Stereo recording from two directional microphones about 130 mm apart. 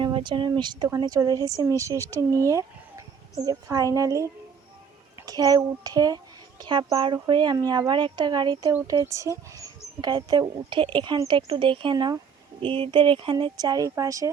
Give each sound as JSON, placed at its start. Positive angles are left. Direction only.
{"t": 0.0, "sound": "speech", "side_deg": -40}